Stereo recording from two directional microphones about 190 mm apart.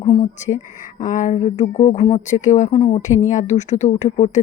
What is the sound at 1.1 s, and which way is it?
Speech, 35° left (ahead or behind).